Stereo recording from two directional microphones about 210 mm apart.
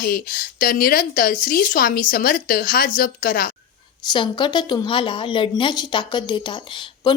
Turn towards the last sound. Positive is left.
turn(degrees=25)  # may be behind; listen again after turning